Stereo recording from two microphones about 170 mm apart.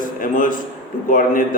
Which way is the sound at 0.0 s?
55° left (ahead or behind).